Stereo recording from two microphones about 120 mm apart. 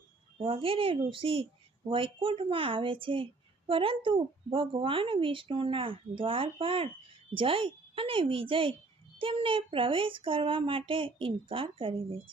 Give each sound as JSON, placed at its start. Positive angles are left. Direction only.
{"t": 0.3, "sound": "speech", "side_deg": -50}